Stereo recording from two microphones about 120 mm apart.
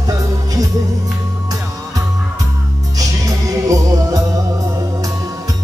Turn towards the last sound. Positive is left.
turn(degrees=-30)  # may be behind; listen again after turning